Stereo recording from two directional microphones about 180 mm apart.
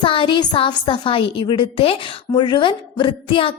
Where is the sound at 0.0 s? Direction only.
30° left (ahead or behind).